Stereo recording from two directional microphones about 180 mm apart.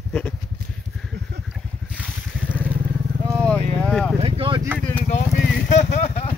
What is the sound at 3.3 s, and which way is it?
Vehicle, 5° left (ahead or behind).